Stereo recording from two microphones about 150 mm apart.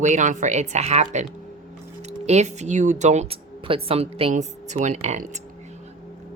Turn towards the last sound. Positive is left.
turn(degrees=-50)  # may be behind; listen again after turning